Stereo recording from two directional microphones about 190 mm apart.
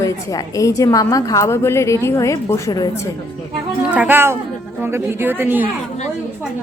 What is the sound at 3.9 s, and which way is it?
A woman's voice, 10° right (ahead or behind).